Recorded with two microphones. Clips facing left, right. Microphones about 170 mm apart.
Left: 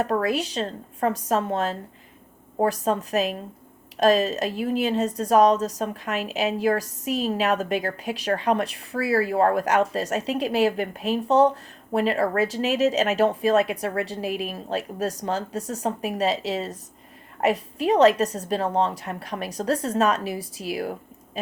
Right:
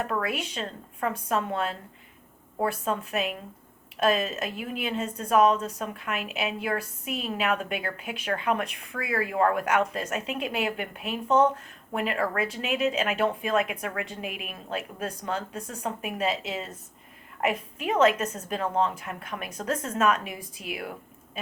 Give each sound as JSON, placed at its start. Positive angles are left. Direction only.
{"t": 0.0, "sound": "a woman's voice", "side_deg": 35}